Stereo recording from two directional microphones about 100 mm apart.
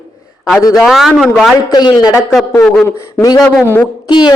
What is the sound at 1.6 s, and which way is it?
Speech, 40° left (ahead or behind).